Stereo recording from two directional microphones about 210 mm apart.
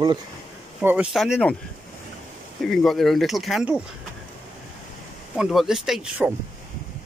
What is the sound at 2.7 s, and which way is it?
Speech, centre (ahead or behind).